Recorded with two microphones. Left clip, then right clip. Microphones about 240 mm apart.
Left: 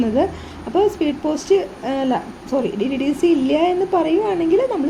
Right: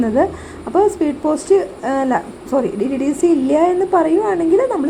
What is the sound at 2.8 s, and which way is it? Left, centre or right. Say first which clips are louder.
Speech: right 2 dB; right.